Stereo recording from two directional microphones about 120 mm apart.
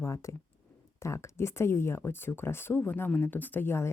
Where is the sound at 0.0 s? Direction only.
25° left (ahead or behind).